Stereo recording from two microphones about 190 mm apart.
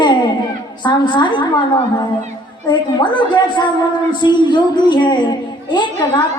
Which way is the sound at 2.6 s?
25° left (ahead or behind).